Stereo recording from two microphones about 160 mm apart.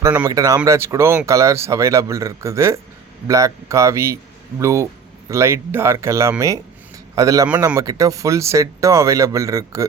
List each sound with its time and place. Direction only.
0.0 s speech: 15° right (ahead or behind)
7.4 s speech: 10° right (ahead or behind)
7.8 s speech: 20° right (ahead or behind)